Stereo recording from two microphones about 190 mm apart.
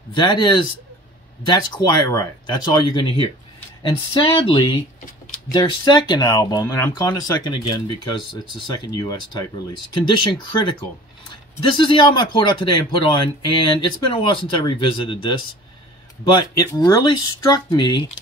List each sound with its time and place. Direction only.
0.1 s speech: 25° left (ahead or behind)
11.2 s a sound: 25° left (ahead or behind)
12.4 s speech: 25° left (ahead or behind)
16.3 s speech: 20° left (ahead or behind)